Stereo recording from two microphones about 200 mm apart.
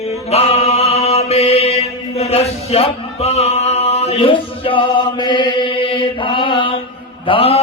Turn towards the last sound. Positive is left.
turn(degrees=30)  # may be behind; listen again after turning